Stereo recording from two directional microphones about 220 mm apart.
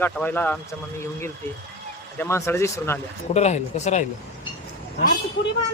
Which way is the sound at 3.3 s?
30° left (ahead or behind).